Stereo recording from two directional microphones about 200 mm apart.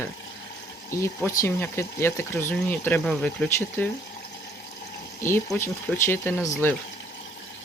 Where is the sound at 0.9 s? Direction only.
15° left (ahead or behind).